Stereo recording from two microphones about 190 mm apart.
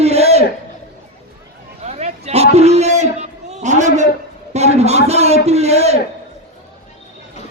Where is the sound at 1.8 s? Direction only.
35° right (ahead or behind).